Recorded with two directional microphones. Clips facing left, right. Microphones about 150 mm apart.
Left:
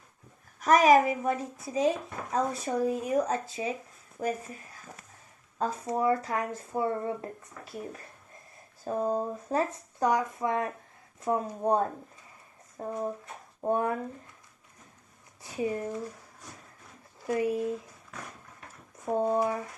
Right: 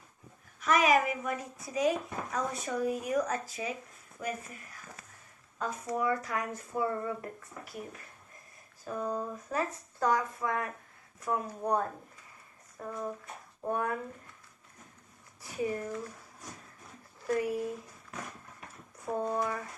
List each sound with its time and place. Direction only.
0.6 s a woman's voice: 40° left (ahead or behind)
4.2 s speech: 50° left (ahead or behind)
5.5 s speech: 30° left (ahead or behind)
8.9 s a woman's voice: 35° left (ahead or behind)
10.0 s speech: 20° left (ahead or behind)
15.4 s speech: 20° left (ahead or behind)
17.2 s speech: 20° left (ahead or behind)
19.0 s speech: 25° left (ahead or behind)